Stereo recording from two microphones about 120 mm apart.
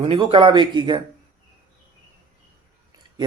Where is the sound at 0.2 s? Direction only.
45° right (ahead or behind).